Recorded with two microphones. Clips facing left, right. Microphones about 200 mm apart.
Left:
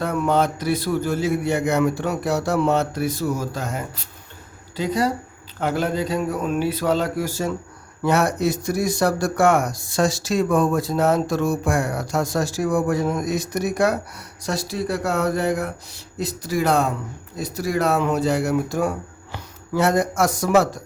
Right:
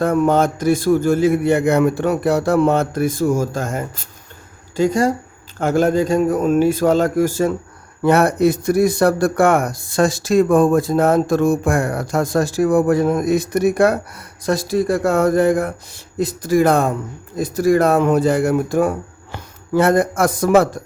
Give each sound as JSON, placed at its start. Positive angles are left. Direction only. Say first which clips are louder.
{"t": 0.0, "sound": "speech", "louder": "right 5 dB", "side_deg": -45}